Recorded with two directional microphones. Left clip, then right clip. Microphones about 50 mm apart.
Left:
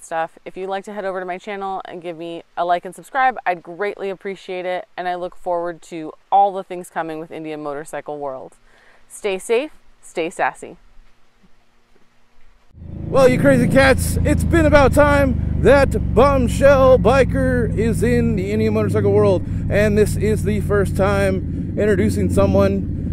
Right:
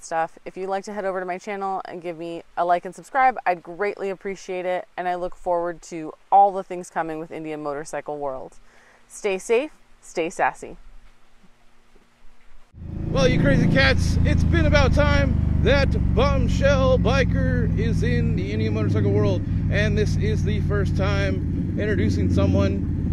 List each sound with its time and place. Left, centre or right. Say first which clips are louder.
0.1 s speech: left 2 dB; left
5.4 s speech: left 1 dB; centre
6.0 s speech: left 1 dB; left
8.2 s a woman's voice: left 2 dB; centre
13.1 s speech: left 8 dB; left